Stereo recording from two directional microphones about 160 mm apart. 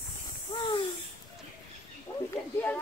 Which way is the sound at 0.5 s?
30° left (ahead or behind).